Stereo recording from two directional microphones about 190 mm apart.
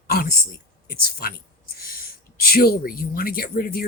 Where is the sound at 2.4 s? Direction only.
50° left (ahead or behind).